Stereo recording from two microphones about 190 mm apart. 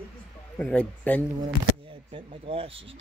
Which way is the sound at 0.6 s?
5° left (ahead or behind).